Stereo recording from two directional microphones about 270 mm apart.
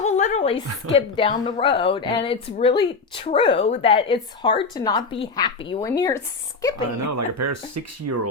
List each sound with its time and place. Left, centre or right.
0.0 s a sound: left
0.9 s speech: left
6.9 s speech: right